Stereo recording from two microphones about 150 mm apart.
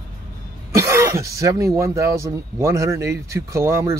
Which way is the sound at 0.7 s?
20° right (ahead or behind).